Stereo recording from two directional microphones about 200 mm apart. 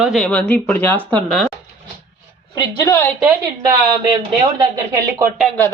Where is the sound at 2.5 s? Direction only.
20° left (ahead or behind).